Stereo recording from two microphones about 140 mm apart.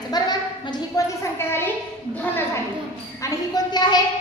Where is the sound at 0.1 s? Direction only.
30° left (ahead or behind).